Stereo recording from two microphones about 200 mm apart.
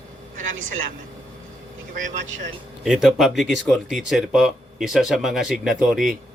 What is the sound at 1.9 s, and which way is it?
Speech, 40° right (ahead or behind).